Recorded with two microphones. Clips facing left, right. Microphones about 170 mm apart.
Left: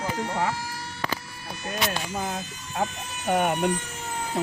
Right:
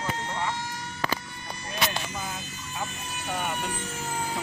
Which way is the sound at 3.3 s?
60° left (ahead or behind).